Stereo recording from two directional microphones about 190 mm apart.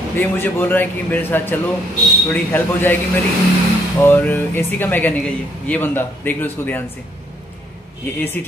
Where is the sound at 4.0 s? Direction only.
10° left (ahead or behind).